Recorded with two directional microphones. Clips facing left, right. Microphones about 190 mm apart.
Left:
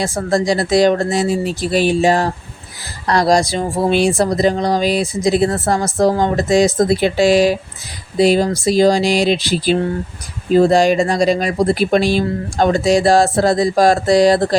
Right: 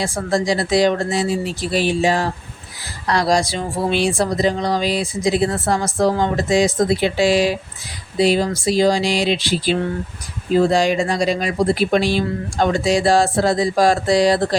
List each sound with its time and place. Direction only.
0.0 s speech: 45° left (ahead or behind)